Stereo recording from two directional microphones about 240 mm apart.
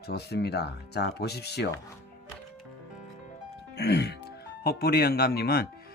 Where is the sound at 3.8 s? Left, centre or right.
Left.